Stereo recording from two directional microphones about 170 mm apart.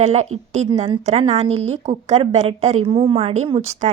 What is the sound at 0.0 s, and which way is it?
A woman's voice, 40° right (ahead or behind).